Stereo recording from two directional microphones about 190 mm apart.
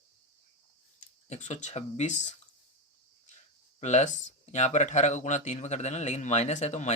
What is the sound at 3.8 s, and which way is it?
Speech, 35° left (ahead or behind).